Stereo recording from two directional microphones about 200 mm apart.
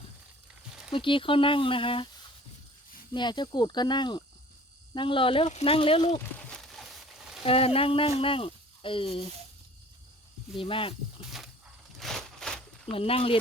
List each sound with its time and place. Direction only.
0.9 s speech: 25° left (ahead or behind)
3.1 s speech: 20° left (ahead or behind)
6.1 s a sound: 5° left (ahead or behind)
7.4 s speech: 30° left (ahead or behind)
10.6 s speech: 25° left (ahead or behind)
11.9 s a sound: centre (ahead or behind)
12.9 s speech: 30° left (ahead or behind)